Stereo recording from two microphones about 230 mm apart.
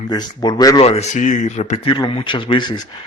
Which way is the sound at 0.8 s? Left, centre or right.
Left.